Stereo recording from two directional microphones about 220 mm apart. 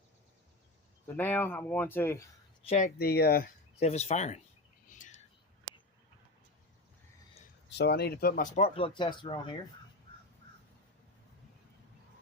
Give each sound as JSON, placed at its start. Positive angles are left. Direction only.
{"t": 1.0, "sound": "speech", "side_deg": 10}
{"t": 2.6, "sound": "speech", "side_deg": 35}
{"t": 3.8, "sound": "speech", "side_deg": 30}
{"t": 4.9, "sound": "bird", "side_deg": 35}
{"t": 7.7, "sound": "speech", "side_deg": 50}